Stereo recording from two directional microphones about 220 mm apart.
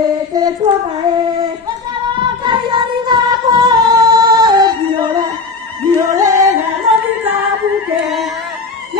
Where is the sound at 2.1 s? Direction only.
20° right (ahead or behind).